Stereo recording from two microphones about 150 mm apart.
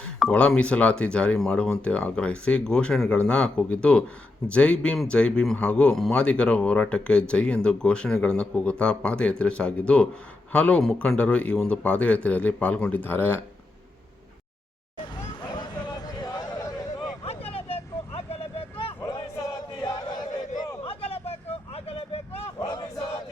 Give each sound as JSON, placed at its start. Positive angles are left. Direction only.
{"t": 0.2, "sound": "a man's voice", "side_deg": 5}
{"t": 16.2, "sound": "a sound", "side_deg": 25}
{"t": 17.2, "sound": "vehicle", "side_deg": 40}
{"t": 19.8, "sound": "chant", "side_deg": 30}
{"t": 20.8, "sound": "vehicle", "side_deg": 40}
{"t": 22.6, "sound": "battle cry", "side_deg": 30}